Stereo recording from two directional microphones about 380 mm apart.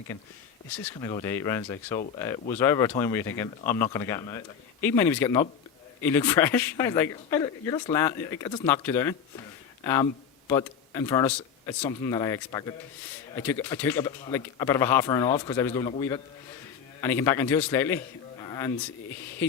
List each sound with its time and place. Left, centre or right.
1.0 s a man's voice: centre